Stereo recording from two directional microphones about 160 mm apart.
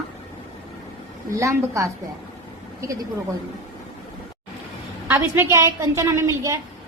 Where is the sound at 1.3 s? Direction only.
20° right (ahead or behind).